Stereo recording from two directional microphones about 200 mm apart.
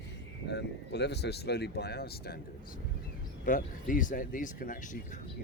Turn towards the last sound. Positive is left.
turn(degrees=45)  # may be behind; listen again after turning